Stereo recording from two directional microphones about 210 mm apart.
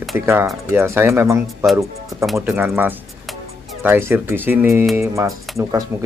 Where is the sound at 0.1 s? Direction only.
10° right (ahead or behind).